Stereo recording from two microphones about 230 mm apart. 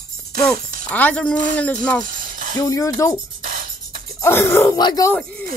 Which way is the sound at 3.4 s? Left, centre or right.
Right.